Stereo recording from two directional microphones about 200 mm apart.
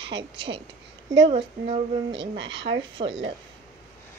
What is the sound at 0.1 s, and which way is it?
Speech, 25° right (ahead or behind).